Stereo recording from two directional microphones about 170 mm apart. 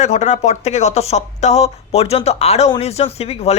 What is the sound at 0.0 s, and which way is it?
Speech, 40° left (ahead or behind).